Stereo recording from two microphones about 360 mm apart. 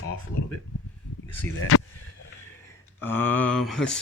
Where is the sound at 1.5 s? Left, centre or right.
Left.